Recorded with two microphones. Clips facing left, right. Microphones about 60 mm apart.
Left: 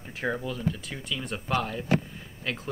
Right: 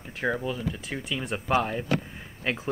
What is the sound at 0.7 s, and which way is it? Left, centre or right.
Speech, centre.